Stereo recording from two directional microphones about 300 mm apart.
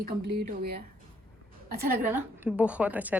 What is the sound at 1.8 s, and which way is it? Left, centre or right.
A woman's voice, centre.